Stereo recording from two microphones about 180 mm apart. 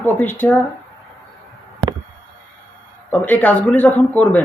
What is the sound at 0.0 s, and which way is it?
Speech, 10° left (ahead or behind).